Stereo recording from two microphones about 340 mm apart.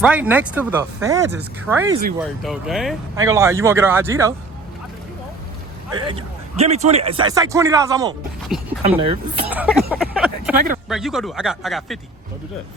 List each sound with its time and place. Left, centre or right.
0.0 s speech: centre
1.9 s speech: right
2.1 s speech: centre
5.9 s speech: centre
9.5 s speech: centre